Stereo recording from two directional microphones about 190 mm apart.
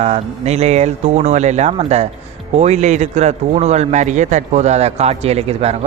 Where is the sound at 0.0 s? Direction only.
35° right (ahead or behind).